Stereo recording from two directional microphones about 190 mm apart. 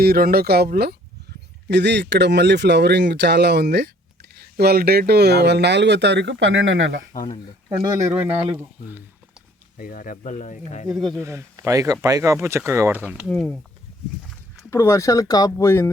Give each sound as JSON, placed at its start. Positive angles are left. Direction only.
{"t": 0.0, "sound": "speech", "side_deg": -50}
{"t": 7.1, "sound": "speech", "side_deg": 45}
{"t": 7.9, "sound": "speech", "side_deg": -35}
{"t": 9.7, "sound": "speech", "side_deg": 50}
{"t": 10.8, "sound": "speech", "side_deg": 0}
{"t": 11.2, "sound": "speech", "side_deg": -15}
{"t": 14.7, "sound": "speech", "side_deg": 15}